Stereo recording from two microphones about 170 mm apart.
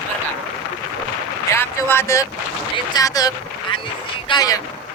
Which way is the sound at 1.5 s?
15° left (ahead or behind).